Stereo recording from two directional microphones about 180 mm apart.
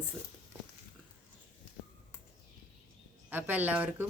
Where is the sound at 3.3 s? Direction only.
10° right (ahead or behind).